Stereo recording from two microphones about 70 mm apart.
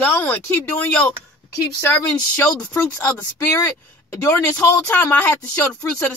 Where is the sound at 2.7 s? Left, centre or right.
Left.